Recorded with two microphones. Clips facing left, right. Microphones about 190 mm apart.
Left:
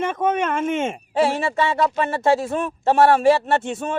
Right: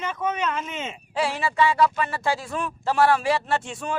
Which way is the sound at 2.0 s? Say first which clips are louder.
Left 7 dB; 40° left (ahead or behind).